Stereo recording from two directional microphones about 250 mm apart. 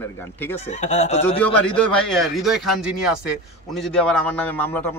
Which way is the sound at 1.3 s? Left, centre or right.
Centre.